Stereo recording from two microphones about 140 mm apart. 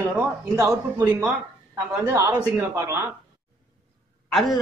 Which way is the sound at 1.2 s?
5° right (ahead or behind).